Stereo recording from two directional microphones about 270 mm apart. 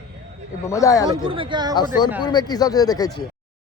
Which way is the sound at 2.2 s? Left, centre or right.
Centre.